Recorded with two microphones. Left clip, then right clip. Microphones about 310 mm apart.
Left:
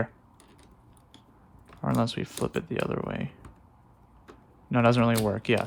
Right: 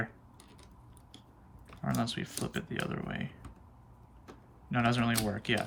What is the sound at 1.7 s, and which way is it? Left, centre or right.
Speech, centre.